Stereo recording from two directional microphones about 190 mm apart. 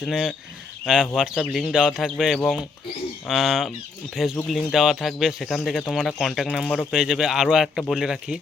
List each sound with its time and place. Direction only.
0.0 s speech: centre (ahead or behind)